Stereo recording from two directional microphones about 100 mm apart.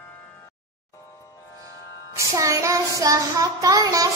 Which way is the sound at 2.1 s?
30° right (ahead or behind).